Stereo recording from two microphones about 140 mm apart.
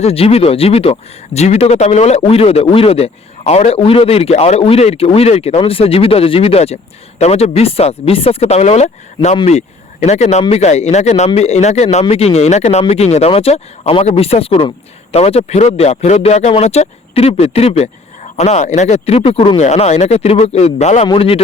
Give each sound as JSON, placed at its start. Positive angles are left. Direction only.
{"t": 0.0, "sound": "speech", "side_deg": 45}
{"t": 21.1, "sound": "speech", "side_deg": 40}